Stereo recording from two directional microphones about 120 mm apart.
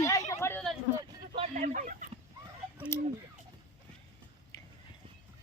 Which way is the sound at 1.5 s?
90° right.